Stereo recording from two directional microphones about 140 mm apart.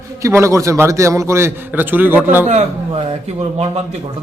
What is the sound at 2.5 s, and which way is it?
A man's voice, 50° right (ahead or behind).